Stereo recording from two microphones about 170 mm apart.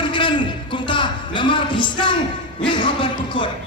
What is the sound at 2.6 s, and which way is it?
Speech, 30° left (ahead or behind).